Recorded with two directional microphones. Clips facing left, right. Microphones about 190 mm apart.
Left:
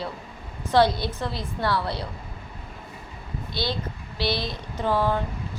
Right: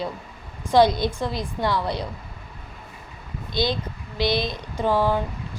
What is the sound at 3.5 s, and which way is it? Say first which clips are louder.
A woman's voice: right 5 dB; 15° right (ahead or behind).